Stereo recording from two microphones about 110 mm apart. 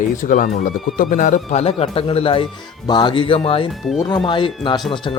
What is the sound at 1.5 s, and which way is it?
Speech, 70° left (ahead or behind).